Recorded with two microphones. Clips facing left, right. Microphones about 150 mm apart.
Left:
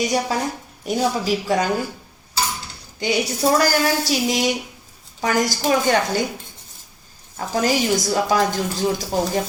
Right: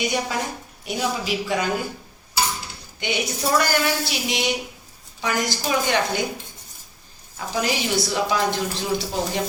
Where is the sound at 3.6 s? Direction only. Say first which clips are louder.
Left 3 dB; 40° left (ahead or behind).